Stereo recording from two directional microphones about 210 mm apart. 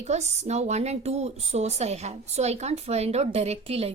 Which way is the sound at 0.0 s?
30° right (ahead or behind).